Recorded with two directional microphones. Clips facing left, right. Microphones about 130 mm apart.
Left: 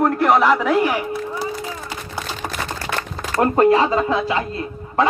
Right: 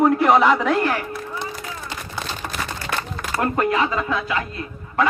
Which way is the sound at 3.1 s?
35° left (ahead or behind).